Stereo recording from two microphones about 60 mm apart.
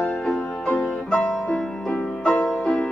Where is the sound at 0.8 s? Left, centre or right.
Centre.